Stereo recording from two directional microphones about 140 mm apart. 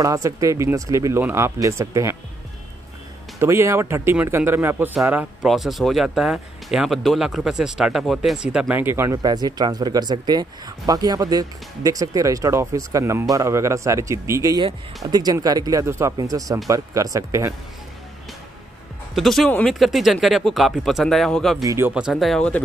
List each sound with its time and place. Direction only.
0.0 s speech: 25° right (ahead or behind)
3.3 s speech: 20° right (ahead or behind)
5.5 s speech: centre (ahead or behind); by 17.6 s 20° right (ahead or behind)
19.1 s speech: centre (ahead or behind)
21.6 s speech: 20° right (ahead or behind)
21.9 s speech: centre (ahead or behind)